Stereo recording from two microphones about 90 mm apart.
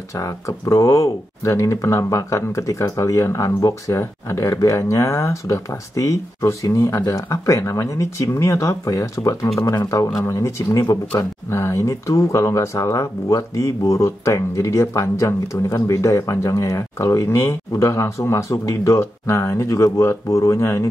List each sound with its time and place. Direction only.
0.1 s speech: 35° left (ahead or behind)